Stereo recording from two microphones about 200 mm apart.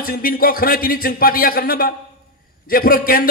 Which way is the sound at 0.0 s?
45° left (ahead or behind).